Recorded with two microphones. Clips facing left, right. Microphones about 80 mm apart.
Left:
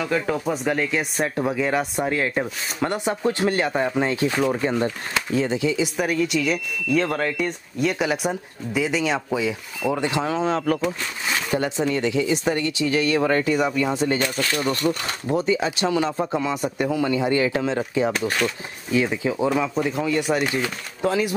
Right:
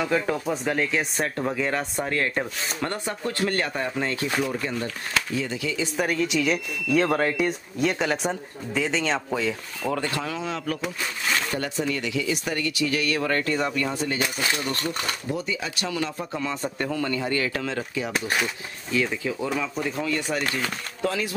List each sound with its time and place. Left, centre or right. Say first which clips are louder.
0.0 s speech: left 1 dB; centre
4.5 s speech: left 7 dB; left
5.9 s speech: left 2 dB; centre
10.2 s speech: left 7 dB; left
11.2 s speech: left 4 dB; centre
14.6 s speech: left 6 dB; left
15.3 s speech: left 8 dB; left
16.4 s speech: left 5 dB; centre